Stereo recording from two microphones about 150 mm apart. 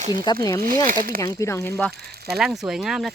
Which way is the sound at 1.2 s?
20° left (ahead or behind).